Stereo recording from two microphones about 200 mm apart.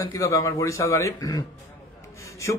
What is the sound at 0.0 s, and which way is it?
Speech, 15° left (ahead or behind).